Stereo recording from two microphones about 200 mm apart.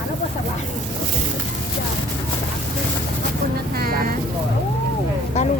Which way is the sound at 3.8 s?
50° right (ahead or behind).